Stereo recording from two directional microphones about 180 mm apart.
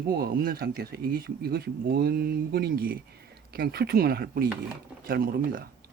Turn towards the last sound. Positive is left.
turn(degrees=-55)  # may be behind; listen again after turning